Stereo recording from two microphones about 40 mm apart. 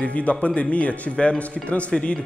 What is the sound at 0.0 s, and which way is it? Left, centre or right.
Speech, left.